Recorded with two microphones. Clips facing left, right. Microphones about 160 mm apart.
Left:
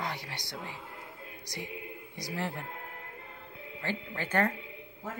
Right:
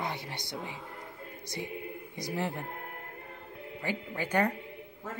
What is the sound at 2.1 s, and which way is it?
Speech, 20° right (ahead or behind).